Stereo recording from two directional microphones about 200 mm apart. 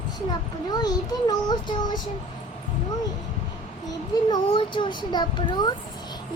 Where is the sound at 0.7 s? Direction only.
20° left (ahead or behind).